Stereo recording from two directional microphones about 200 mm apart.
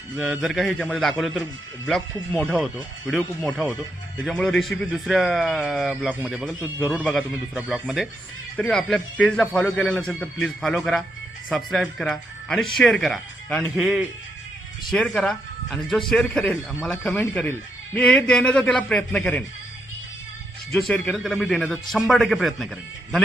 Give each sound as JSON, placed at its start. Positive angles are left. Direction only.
{"t": 0.2, "sound": "speech", "side_deg": 0}
{"t": 6.6, "sound": "a man's voice", "side_deg": 15}
{"t": 20.7, "sound": "speech", "side_deg": 5}